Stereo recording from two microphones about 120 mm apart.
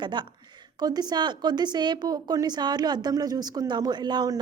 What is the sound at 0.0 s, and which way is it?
A woman's voice, 40° right (ahead or behind).